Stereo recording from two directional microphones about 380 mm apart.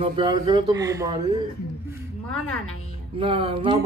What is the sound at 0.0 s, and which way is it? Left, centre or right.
A man's voice, centre.